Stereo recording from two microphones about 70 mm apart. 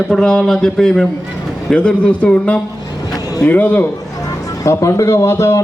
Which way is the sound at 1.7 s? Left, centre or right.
Centre.